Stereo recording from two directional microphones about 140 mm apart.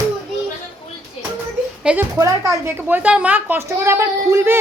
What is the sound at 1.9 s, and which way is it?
A woman's voice, 5° right (ahead or behind).